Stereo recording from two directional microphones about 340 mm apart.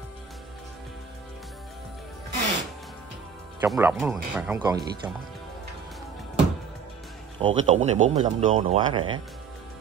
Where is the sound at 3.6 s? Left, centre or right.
Centre.